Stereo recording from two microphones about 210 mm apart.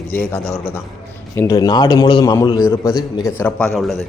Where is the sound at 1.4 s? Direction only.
15° left (ahead or behind).